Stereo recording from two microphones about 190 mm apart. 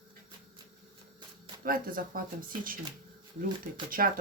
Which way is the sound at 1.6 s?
50° right (ahead or behind).